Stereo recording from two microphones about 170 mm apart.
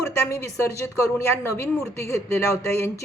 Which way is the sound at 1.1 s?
15° left (ahead or behind).